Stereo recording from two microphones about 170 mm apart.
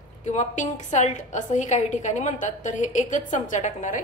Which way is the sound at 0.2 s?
45° left (ahead or behind).